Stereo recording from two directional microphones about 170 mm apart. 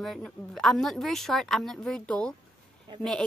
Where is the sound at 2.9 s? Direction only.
25° right (ahead or behind).